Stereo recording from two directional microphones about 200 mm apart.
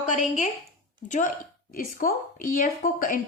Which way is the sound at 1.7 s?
45° left (ahead or behind).